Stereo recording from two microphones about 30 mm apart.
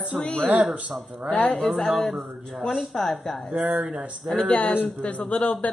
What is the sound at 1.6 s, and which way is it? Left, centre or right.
Speech, centre.